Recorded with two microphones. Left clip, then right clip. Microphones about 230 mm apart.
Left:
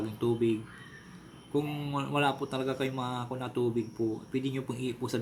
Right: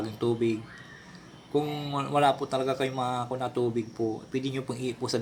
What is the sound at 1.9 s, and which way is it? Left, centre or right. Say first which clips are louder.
Speech: right 5 dB; centre.